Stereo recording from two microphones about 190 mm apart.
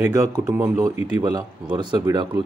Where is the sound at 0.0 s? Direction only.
15° right (ahead or behind).